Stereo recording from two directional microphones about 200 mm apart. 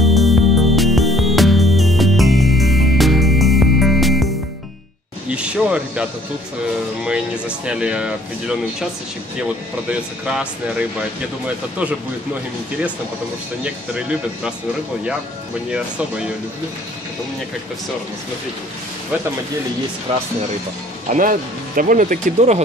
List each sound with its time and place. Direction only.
0.0 s music: centre (ahead or behind)
5.3 s a sound: 5° right (ahead or behind)
7.1 s speech: 5° right (ahead or behind)
9.8 s speech: 5° right (ahead or behind)
13.7 s speech: 5° right (ahead or behind)
15.7 s speech: 5° right (ahead or behind)
21.1 s speech: 40° right (ahead or behind)